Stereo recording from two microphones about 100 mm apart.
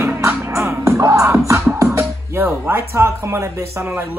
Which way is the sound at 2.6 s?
25° right (ahead or behind).